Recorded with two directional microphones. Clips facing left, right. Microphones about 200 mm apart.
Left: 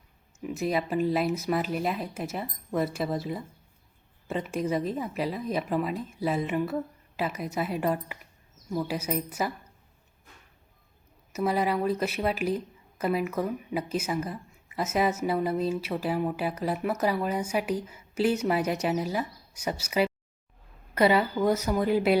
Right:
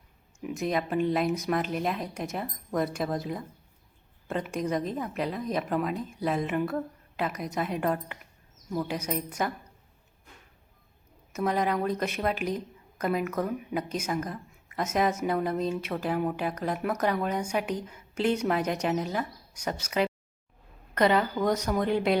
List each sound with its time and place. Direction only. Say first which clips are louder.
0.4 s speech: left 1 dB; 5° left (ahead or behind)
11.3 s speech: left 1 dB; 5° left (ahead or behind)